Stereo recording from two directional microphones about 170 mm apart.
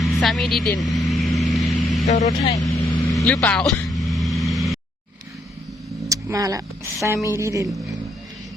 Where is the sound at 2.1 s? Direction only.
45° left (ahead or behind).